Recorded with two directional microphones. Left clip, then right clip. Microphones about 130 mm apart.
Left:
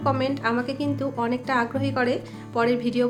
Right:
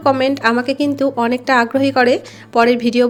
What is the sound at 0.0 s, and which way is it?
A woman's voice, 50° right (ahead or behind).